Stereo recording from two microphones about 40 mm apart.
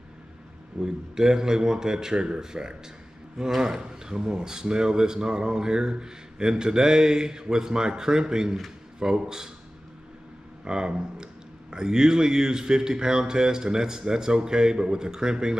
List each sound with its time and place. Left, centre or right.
0.7 s speech: centre
10.6 s speech: right